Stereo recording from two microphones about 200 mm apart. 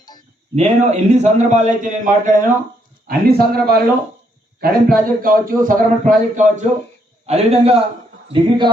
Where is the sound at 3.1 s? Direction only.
50° right (ahead or behind).